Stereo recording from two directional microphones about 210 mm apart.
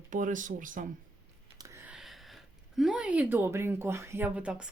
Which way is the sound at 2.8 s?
5° right (ahead or behind).